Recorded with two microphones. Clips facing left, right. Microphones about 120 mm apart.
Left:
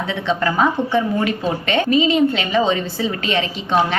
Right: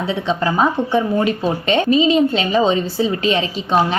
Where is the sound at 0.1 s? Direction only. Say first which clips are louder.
Right 1 dB; 15° right (ahead or behind).